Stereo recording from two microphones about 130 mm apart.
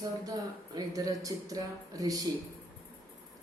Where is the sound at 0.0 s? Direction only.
30° right (ahead or behind).